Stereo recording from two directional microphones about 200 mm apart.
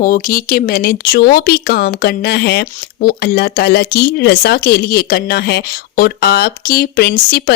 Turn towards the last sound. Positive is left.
turn(degrees=55)  # may be behind; listen again after turning